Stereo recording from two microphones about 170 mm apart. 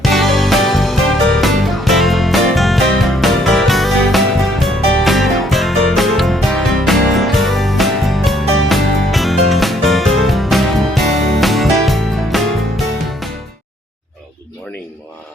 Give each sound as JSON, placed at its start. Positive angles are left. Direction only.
{"t": 0.0, "sound": "music", "side_deg": 0}